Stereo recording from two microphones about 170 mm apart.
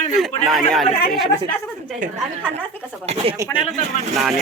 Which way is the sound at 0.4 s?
Centre (ahead or behind).